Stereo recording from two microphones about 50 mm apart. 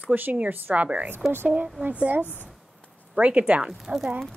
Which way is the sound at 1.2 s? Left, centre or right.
Centre.